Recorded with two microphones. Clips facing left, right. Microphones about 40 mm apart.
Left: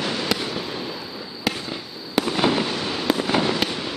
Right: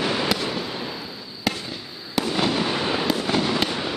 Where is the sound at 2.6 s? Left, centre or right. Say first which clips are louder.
Right 2 dB; centre.